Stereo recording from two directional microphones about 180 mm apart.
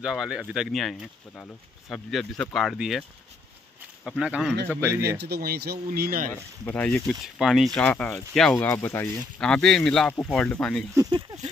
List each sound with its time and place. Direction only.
0.0 s speech: 5° right (ahead or behind)
4.6 s speech: 15° right (ahead or behind)
5.1 s speech: 65° right (ahead or behind)
6.6 s speech: 10° left (ahead or behind)
11.0 s speech: 25° right (ahead or behind)